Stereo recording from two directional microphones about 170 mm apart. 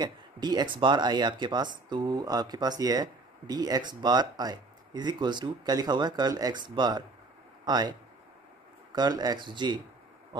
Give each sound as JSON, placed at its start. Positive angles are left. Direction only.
{"t": 0.0, "sound": "speech", "side_deg": -25}
{"t": 8.9, "sound": "speech", "side_deg": -25}